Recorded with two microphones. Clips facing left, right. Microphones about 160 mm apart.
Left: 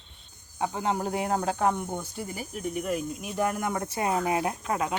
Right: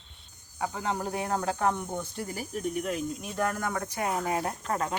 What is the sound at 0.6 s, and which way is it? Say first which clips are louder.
Speech: left 3 dB; 20° left (ahead or behind).